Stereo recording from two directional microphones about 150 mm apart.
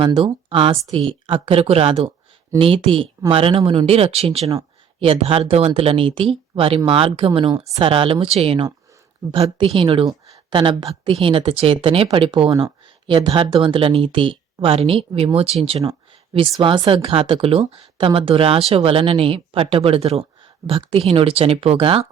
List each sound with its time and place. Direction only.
0.0 s speech: 35° right (ahead or behind)